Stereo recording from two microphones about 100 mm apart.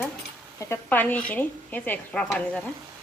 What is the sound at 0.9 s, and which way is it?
Speech, 15° left (ahead or behind).